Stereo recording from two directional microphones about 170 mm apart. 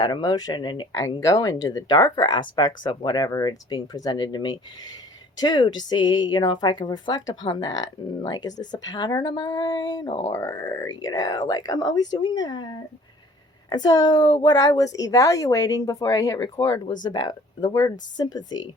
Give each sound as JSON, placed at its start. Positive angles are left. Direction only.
{"t": 0.0, "sound": "speech", "side_deg": 25}